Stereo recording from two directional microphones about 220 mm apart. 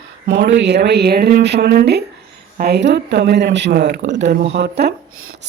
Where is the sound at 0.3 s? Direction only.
55° right (ahead or behind).